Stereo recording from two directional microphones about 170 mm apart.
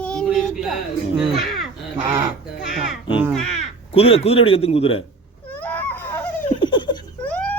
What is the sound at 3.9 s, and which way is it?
Speech, 35° left (ahead or behind).